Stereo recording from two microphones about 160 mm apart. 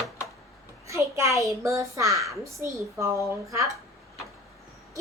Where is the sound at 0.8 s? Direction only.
20° right (ahead or behind).